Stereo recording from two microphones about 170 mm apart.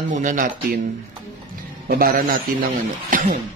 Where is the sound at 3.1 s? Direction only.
50° right (ahead or behind).